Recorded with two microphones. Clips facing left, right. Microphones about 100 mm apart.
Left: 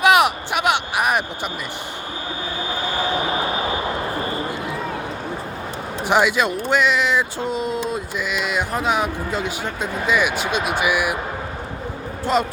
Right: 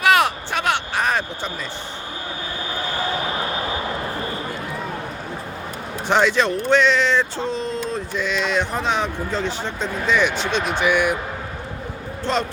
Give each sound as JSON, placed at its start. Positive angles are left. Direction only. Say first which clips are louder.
{"t": 0.0, "sound": "a sound", "louder": "left 2 dB", "side_deg": 15}
{"t": 6.1, "sound": "speech", "louder": "even", "side_deg": 10}
{"t": 12.2, "sound": "speech", "louder": "left 3 dB", "side_deg": 10}